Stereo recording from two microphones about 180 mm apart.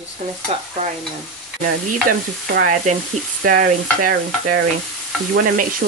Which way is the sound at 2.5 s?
50° right (ahead or behind).